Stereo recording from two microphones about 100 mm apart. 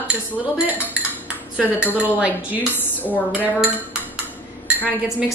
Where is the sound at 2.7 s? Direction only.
15° left (ahead or behind).